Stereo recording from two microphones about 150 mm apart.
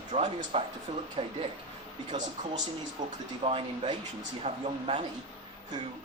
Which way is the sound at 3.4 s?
40° right (ahead or behind).